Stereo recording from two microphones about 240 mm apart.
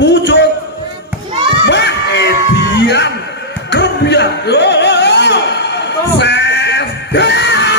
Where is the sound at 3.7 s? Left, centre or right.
Left.